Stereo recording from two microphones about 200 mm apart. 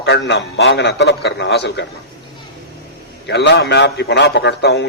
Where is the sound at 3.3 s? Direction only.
60° left (ahead or behind).